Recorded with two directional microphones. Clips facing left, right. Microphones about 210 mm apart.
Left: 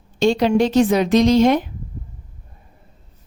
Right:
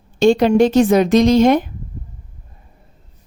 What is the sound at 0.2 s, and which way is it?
A woman's voice, 50° right (ahead or behind).